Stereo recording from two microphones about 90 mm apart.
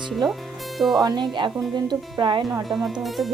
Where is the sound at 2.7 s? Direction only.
Centre (ahead or behind).